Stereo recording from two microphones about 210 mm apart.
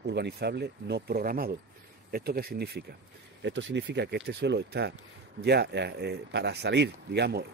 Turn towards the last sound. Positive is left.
turn(degrees=-50)  # may be behind; listen again after turning